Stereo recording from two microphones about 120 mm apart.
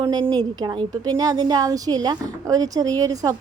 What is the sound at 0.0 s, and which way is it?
A woman's voice, 35° right (ahead or behind).